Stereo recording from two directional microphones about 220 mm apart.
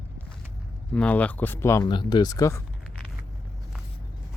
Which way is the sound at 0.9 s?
5° left (ahead or behind).